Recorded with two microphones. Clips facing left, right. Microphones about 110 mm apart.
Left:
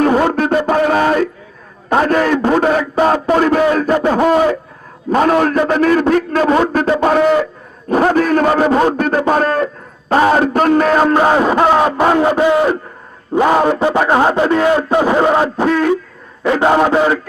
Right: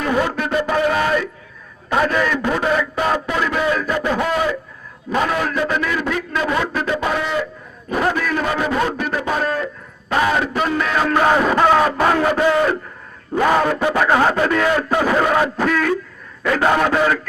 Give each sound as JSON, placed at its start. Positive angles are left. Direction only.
{"t": 0.0, "sound": "music", "side_deg": 45}
{"t": 1.9, "sound": "a man's voice", "side_deg": 45}
{"t": 11.1, "sound": "a man's voice", "side_deg": 25}